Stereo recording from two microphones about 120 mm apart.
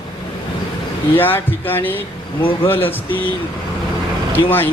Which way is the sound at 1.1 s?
15° left (ahead or behind).